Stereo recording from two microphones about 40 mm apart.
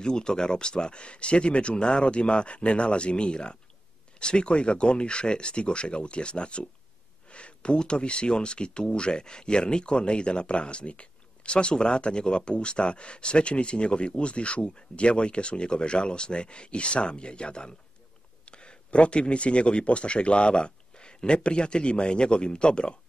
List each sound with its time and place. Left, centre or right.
0.0 s speech: centre